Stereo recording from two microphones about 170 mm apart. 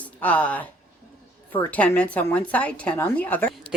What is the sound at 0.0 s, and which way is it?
Speech, 10° left (ahead or behind).